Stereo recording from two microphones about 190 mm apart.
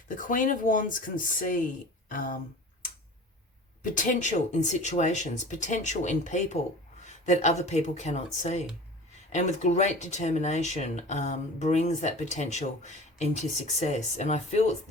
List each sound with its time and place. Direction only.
0.2 s speech: 45° left (ahead or behind)
3.9 s speech: 40° left (ahead or behind)